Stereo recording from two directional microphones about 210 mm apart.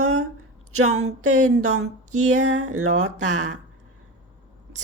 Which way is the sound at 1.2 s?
90° right.